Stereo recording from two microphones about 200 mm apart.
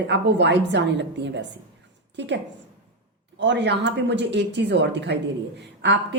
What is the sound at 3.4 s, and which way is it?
Speech, 60° right (ahead or behind).